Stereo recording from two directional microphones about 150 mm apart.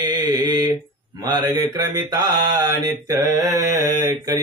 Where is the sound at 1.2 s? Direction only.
30° right (ahead or behind).